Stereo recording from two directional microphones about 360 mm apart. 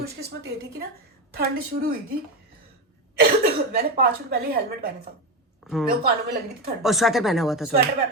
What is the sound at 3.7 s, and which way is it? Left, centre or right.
A woman's voice, right.